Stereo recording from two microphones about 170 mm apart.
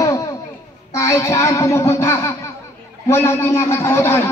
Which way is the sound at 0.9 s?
15° left (ahead or behind).